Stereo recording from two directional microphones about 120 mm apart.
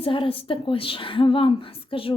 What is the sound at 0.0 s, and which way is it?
A woman's voice, 45° left (ahead or behind).